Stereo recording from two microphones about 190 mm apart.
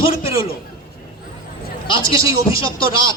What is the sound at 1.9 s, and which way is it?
A man's voice, 25° left (ahead or behind).